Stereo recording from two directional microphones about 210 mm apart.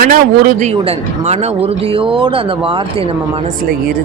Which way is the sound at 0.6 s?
30° right (ahead or behind).